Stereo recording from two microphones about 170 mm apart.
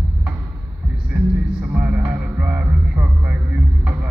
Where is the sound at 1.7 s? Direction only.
10° right (ahead or behind).